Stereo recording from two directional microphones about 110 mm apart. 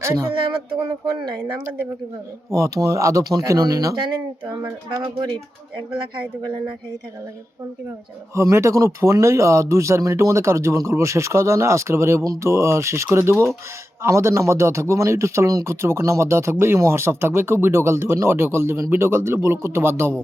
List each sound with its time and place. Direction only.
0.0 s speech: 25° right (ahead or behind)
0.8 s speech: 40° right (ahead or behind)
2.5 s a man's voice: 30° right (ahead or behind)
8.4 s a man's voice: 25° right (ahead or behind)